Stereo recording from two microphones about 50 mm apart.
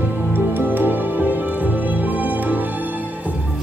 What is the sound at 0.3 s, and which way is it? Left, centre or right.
Music, right.